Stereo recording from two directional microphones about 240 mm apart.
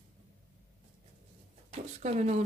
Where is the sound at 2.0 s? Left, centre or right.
Right.